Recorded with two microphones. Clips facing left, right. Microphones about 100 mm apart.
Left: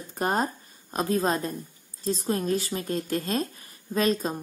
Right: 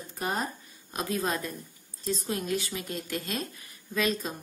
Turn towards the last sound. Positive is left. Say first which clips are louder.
# left 5 dB
turn(degrees=40)  # may be behind; listen again after turning